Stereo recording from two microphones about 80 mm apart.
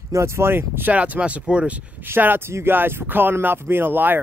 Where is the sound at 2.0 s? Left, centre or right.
Right.